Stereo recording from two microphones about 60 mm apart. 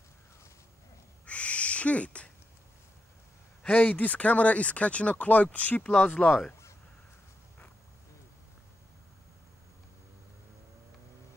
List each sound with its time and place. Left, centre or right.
1.2 s owl: left
3.6 s speech: left